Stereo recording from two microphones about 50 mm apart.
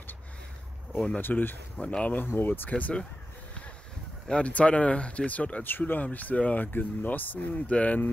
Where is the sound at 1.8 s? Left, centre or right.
Left.